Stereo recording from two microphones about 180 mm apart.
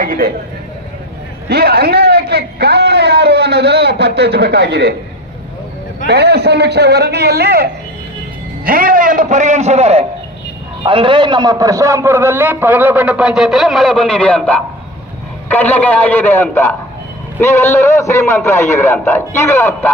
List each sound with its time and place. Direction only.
0.0 s a man's voice: 50° right (ahead or behind)
1.5 s a man's voice: 60° right (ahead or behind)
6.1 s a man's voice: 65° right (ahead or behind); by 19.9 s 15° left (ahead or behind)